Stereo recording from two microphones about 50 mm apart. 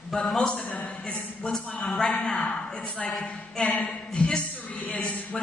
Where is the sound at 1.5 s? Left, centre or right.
Centre.